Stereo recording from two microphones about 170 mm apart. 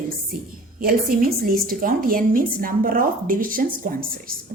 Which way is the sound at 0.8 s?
60° right (ahead or behind).